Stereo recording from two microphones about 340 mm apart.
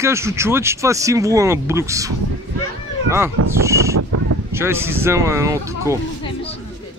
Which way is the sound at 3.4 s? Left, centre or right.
Right.